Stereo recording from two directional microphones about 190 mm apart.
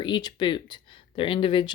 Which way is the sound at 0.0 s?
20° left (ahead or behind).